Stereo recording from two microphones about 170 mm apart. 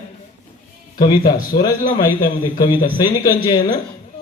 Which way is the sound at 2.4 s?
25° left (ahead or behind).